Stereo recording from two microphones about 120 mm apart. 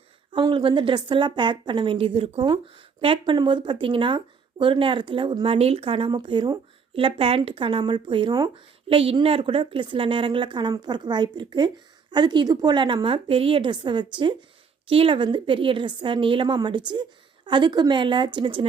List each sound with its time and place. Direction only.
0.3 s a woman's voice: 40° right (ahead or behind)
5.5 s a woman's voice: 55° right (ahead or behind); by 6.6 s 40° right (ahead or behind)
6.9 s a woman's voice: 50° right (ahead or behind)
8.9 s a woman's voice: 50° right (ahead or behind)